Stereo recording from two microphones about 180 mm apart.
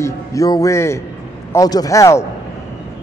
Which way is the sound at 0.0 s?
20° left (ahead or behind).